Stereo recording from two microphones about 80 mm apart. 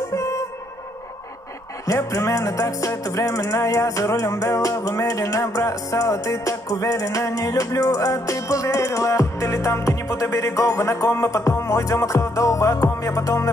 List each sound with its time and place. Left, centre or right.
0.1 s music: left
1.9 s music: left